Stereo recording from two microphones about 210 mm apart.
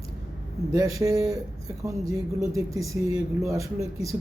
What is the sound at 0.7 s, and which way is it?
A man's voice, 15° right (ahead or behind).